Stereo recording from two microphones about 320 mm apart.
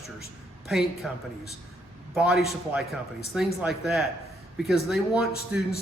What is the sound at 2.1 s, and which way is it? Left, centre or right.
Speech, centre.